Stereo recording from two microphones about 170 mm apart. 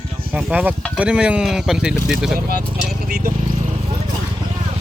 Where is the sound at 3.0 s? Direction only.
55° right (ahead or behind).